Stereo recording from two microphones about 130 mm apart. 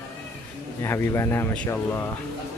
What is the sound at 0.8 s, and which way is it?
A man's voice, 20° left (ahead or behind).